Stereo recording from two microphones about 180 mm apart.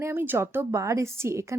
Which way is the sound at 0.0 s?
10° right (ahead or behind).